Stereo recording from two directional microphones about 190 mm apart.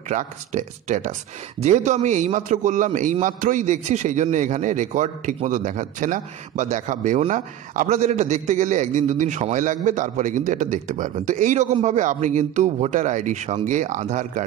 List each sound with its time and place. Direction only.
0.1 s a man's voice: 40° right (ahead or behind)